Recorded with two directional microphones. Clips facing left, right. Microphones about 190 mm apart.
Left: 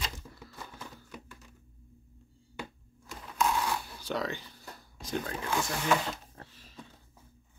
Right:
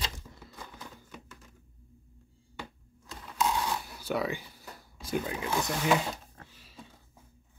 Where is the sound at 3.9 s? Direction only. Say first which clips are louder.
Right 2 dB; 10° right (ahead or behind).